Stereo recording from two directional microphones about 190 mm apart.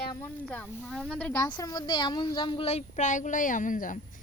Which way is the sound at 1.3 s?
20° left (ahead or behind).